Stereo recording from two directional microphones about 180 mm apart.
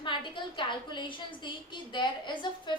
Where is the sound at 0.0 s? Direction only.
25° left (ahead or behind).